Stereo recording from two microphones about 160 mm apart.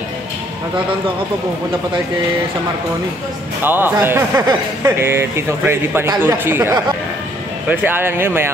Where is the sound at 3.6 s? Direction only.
15° right (ahead or behind).